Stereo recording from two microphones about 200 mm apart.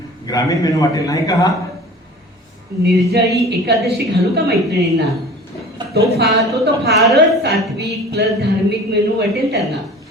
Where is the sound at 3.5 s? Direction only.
55° right (ahead or behind).